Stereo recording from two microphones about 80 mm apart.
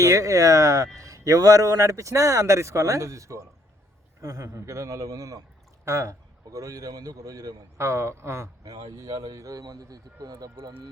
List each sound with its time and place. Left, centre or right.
0.0 s a man's voice: right
8.7 s a man's voice: right